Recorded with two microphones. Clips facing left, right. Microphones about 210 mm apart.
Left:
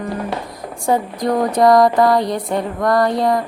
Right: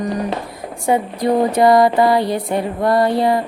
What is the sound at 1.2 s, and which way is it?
Music, 25° right (ahead or behind).